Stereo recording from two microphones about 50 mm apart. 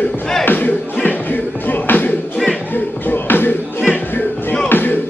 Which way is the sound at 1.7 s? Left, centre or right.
Left.